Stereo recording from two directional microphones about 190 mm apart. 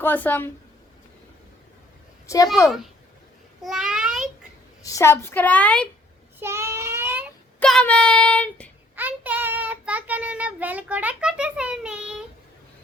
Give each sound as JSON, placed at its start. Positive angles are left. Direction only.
{"t": 0.0, "sound": "a woman's voice", "side_deg": 10}
{"t": 2.2, "sound": "a woman's voice", "side_deg": 15}
{"t": 3.6, "sound": "babbling", "side_deg": 0}
{"t": 4.8, "sound": "a woman's voice", "side_deg": 15}
{"t": 6.4, "sound": "child singing", "side_deg": -15}
{"t": 7.6, "sound": "speech", "side_deg": 5}
{"t": 9.0, "sound": "child singing", "side_deg": -10}